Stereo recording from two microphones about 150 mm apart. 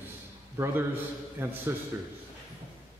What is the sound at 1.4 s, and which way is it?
Speech, 15° right (ahead or behind).